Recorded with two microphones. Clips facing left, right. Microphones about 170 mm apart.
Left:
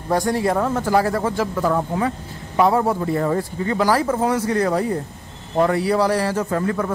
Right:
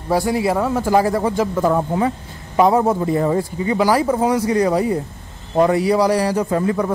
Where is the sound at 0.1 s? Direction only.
5° right (ahead or behind).